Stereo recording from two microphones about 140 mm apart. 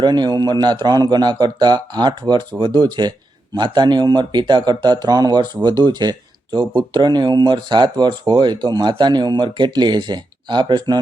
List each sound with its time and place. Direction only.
0.0 s a man's voice: 30° right (ahead or behind)